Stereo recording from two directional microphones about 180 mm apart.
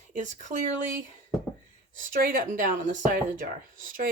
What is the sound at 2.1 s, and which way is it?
Speech, 50° right (ahead or behind).